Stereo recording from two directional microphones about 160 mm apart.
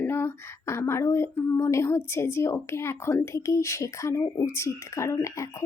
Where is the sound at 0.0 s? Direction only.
15° left (ahead or behind).